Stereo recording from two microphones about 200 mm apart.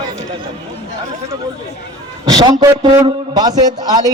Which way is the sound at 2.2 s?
20° right (ahead or behind).